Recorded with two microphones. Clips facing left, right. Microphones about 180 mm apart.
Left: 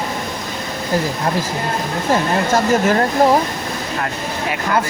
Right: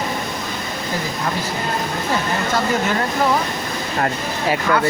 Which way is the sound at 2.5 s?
45° left (ahead or behind).